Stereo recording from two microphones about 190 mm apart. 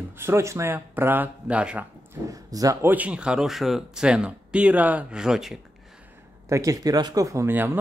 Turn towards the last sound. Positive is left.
turn(degrees=-10)  # may be behind; listen again after turning